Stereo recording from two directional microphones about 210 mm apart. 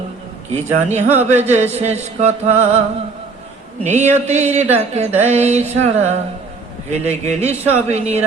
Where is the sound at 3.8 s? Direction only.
35° right (ahead or behind).